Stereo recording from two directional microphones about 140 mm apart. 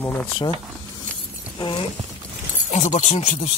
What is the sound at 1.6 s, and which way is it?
Clip-clop, 35° left (ahead or behind).